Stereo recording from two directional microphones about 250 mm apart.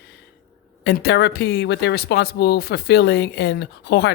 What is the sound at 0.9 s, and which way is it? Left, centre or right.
Speech, left.